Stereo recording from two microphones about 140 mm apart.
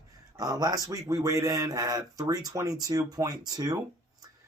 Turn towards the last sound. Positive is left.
turn(degrees=-25)  # may be behind; listen again after turning